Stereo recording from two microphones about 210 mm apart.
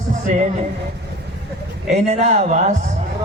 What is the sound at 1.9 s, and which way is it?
Speech, 30° right (ahead or behind).